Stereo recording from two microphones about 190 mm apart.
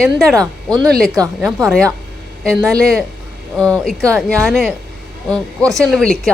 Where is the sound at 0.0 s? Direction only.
Centre (ahead or behind).